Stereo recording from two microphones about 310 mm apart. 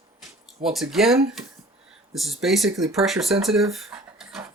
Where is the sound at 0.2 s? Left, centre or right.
Centre.